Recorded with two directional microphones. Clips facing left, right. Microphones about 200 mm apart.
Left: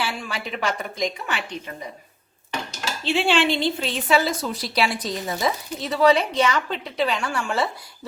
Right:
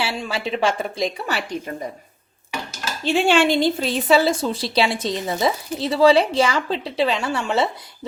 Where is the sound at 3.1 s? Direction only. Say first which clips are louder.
Right 4 dB; 45° right (ahead or behind); by 7.7 s 20° right (ahead or behind).